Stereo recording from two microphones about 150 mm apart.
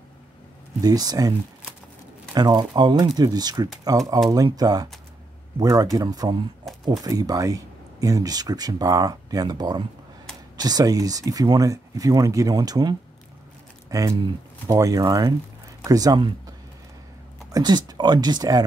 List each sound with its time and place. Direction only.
0.7 s speech: 25° right (ahead or behind)
2.3 s speech: 25° right (ahead or behind)
17.5 s speech: 25° right (ahead or behind)